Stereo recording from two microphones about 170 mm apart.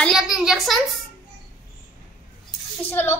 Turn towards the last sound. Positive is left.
turn(degrees=10)  # may be behind; listen again after turning